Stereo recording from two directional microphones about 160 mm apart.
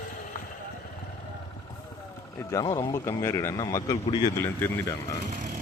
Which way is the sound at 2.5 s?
25° left (ahead or behind).